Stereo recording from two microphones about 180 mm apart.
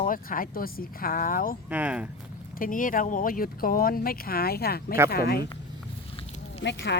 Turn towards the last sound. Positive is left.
turn(degrees=75)  # may be behind; listen again after turning